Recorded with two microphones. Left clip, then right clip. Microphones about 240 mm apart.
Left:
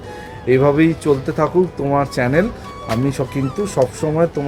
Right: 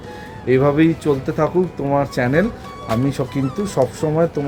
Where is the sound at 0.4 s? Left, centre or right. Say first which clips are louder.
Left 1 dB; centre.